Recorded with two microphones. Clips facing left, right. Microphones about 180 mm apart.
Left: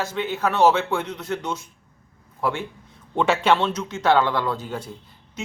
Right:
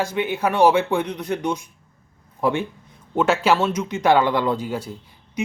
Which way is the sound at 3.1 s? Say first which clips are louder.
Right 1 dB; 5° right (ahead or behind).